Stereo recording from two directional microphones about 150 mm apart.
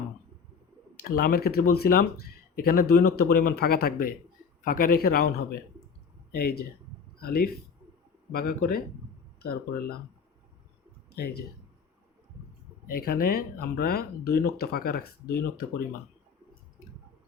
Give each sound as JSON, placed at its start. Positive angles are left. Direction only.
{"t": 1.1, "sound": "speech", "side_deg": 85}
{"t": 4.6, "sound": "speech", "side_deg": 70}
{"t": 6.3, "sound": "speech", "side_deg": 90}
{"t": 11.1, "sound": "speech", "side_deg": 90}
{"t": 12.9, "sound": "speech", "side_deg": 85}